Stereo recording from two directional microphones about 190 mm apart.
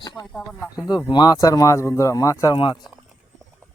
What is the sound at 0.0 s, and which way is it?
Speech, 20° left (ahead or behind).